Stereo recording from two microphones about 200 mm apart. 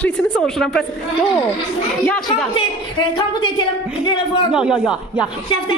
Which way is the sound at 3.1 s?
25° left (ahead or behind).